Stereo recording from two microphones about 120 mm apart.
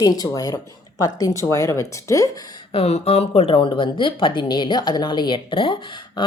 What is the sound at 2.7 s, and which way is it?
Speech, 55° left (ahead or behind).